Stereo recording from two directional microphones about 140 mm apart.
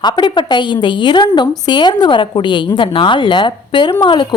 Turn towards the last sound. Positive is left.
turn(degrees=35)  # may be behind; listen again after turning